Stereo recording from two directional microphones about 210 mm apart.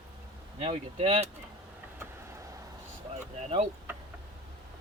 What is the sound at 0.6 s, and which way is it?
Speech, 30° right (ahead or behind).